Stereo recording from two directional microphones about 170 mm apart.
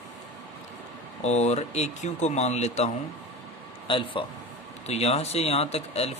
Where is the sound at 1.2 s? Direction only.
40° left (ahead or behind).